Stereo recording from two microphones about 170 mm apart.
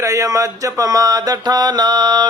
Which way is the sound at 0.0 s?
20° right (ahead or behind).